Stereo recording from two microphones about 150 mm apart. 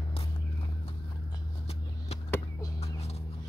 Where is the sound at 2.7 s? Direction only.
45° left (ahead or behind).